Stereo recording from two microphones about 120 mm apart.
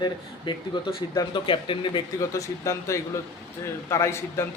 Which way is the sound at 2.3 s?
25° left (ahead or behind).